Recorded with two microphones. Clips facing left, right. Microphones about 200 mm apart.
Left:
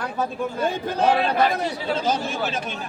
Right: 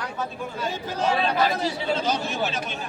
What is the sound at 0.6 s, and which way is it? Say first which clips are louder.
Speech: left 5 dB; 55° left (ahead or behind).